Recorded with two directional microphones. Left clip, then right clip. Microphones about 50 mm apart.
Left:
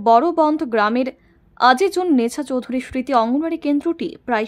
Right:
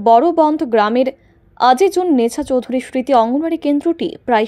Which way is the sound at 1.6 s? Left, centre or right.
Centre.